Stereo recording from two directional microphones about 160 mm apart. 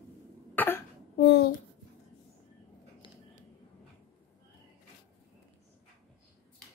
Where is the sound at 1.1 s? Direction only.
80° left.